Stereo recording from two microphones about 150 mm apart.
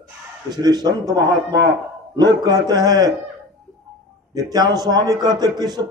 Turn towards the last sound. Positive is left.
turn(degrees=-25)  # may be behind; listen again after turning